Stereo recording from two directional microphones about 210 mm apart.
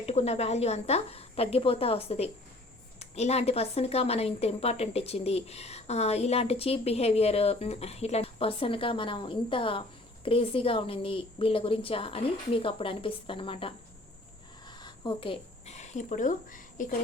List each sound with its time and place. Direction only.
0.0 s speech: 30° left (ahead or behind)